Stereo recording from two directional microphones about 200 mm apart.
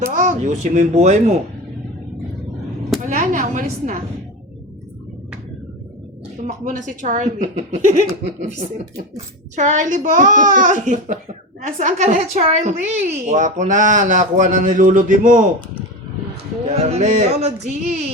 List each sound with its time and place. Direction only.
0.0 s speech: 40° right (ahead or behind)
3.0 s a woman's voice: 40° right (ahead or behind)
6.5 s a woman's voice: 40° right (ahead or behind)
16.6 s a woman's voice: 35° right (ahead or behind)